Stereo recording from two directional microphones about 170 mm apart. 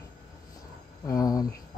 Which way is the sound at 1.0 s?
20° left (ahead or behind).